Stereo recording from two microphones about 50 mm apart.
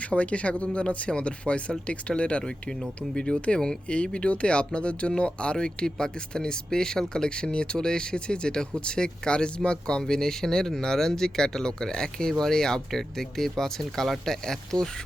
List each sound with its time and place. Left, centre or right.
0.0 s speech: left; by 14.8 s centre